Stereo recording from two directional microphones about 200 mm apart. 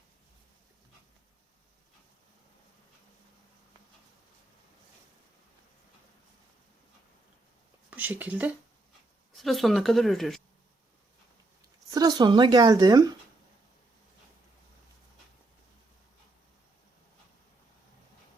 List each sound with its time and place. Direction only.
7.9 s speech: 10° right (ahead or behind)
11.9 s speech: 20° right (ahead or behind)